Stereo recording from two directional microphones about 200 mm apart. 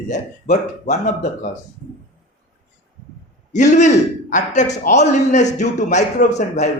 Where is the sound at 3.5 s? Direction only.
35° left (ahead or behind).